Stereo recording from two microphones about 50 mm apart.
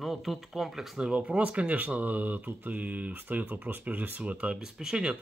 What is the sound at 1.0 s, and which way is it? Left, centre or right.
Speech, right.